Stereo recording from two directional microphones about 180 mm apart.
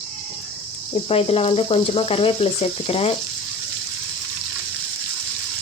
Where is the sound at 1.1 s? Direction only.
35° left (ahead or behind).